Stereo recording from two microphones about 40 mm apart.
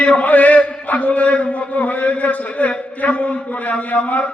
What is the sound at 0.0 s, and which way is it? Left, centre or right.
A man's voice, left.